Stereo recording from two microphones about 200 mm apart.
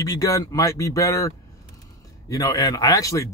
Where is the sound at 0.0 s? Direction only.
15° left (ahead or behind).